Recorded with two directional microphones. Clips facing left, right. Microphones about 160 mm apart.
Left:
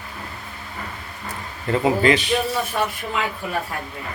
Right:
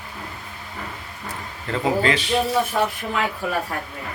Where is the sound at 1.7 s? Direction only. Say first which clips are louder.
Left 3 dB; 15° left (ahead or behind).